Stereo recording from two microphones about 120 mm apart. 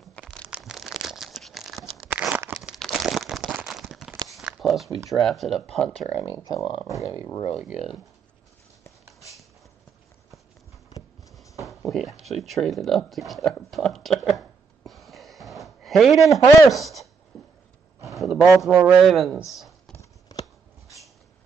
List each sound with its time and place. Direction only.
0.5 s crumpling: 5° right (ahead or behind)
2.0 s tearing: 10° right (ahead or behind)
2.6 s a sound: centre (ahead or behind)
4.3 s walk: 5° right (ahead or behind)
5.2 s speech: centre (ahead or behind)
6.3 s speech: 35° left (ahead or behind)
7.6 s speech: 5° right (ahead or behind)
11.6 s speech: centre (ahead or behind)
14.9 s a sound: centre (ahead or behind)
16.3 s speech: 25° left (ahead or behind)
16.7 s a woman's voice: centre (ahead or behind)
17.3 s a sound: centre (ahead or behind)
18.9 s speech: centre (ahead or behind)
20.0 s a sound: 30° left (ahead or behind)